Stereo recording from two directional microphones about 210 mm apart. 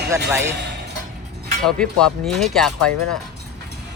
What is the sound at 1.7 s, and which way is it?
Speech, 5° left (ahead or behind).